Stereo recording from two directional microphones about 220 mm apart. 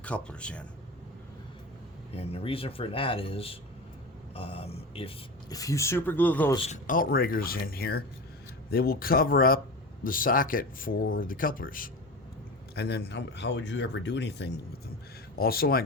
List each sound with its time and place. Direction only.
0.0 s speech: 5° left (ahead or behind)
2.1 s speech: 25° left (ahead or behind); by 6.6 s 10° left (ahead or behind)
6.6 s speech: 35° left (ahead or behind)